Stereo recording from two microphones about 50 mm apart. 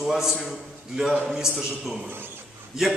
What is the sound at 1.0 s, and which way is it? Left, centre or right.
A man's voice, centre.